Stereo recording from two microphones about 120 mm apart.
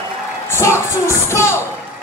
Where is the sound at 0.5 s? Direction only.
25° left (ahead or behind).